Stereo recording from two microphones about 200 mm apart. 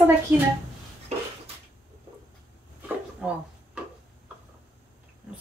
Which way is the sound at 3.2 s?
5° right (ahead or behind).